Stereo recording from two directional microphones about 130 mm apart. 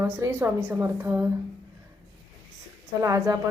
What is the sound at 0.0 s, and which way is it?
A woman's voice, 20° right (ahead or behind).